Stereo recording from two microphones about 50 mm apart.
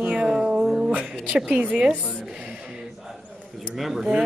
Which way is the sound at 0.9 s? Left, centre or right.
Right.